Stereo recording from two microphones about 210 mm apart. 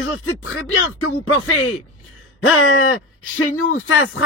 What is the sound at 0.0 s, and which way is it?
Speech, 75° left (ahead or behind).